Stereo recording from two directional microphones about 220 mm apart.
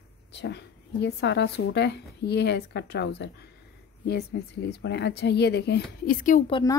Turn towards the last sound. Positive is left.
turn(degrees=20)  # may be behind; listen again after turning